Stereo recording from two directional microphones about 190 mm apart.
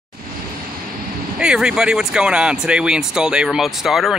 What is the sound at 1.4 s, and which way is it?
Speech, 5° right (ahead or behind).